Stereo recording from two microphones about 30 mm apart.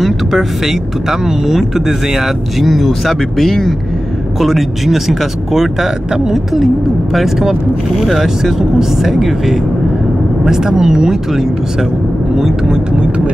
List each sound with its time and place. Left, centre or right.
0.0 s speech: centre
4.4 s speech: centre
7.4 s speech: centre
8.1 s speech: centre
10.4 s speech: right